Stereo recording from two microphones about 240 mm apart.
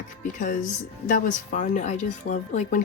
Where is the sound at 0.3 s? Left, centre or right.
Left.